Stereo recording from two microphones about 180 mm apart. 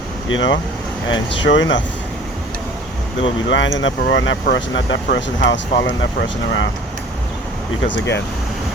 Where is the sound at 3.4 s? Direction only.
90° left.